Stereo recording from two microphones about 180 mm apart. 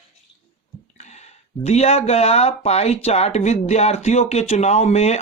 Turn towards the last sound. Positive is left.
turn(degrees=35)  # may be behind; listen again after turning